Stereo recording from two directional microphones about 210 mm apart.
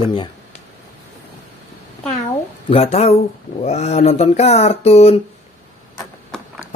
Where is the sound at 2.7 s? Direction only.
30° left (ahead or behind).